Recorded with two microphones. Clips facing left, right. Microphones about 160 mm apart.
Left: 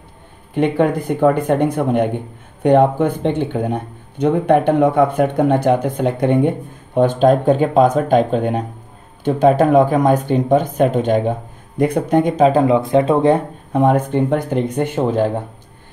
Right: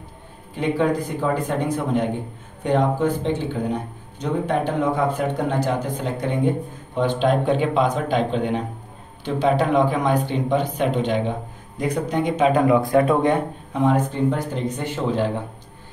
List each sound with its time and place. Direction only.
0.6 s speech: 60° left (ahead or behind)
7.0 s speech: 45° left (ahead or behind); by 13.4 s 30° left (ahead or behind)
13.7 s speech: 55° left (ahead or behind)